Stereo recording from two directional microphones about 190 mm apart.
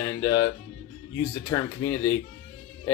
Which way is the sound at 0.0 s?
20° left (ahead or behind).